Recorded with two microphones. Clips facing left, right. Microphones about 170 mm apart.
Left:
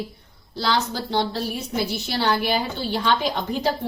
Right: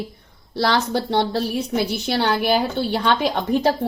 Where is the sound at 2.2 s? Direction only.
55° right (ahead or behind).